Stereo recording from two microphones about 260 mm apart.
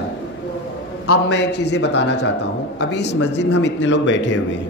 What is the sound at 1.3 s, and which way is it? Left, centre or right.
A man's voice, left.